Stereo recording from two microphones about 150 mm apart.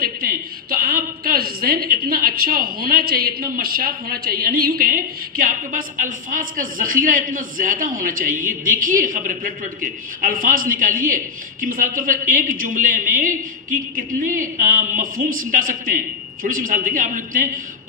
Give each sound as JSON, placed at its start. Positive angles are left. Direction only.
{"t": 0.0, "sound": "a woman's voice", "side_deg": -75}